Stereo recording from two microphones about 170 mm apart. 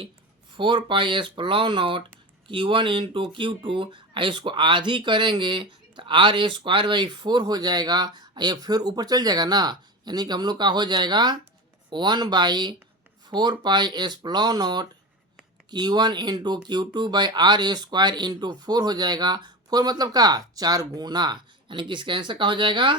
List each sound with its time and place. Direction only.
0.5 s speech: 30° right (ahead or behind)